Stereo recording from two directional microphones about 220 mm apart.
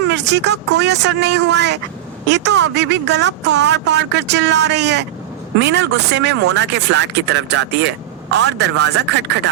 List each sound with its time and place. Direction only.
0.1 s speech: 50° right (ahead or behind)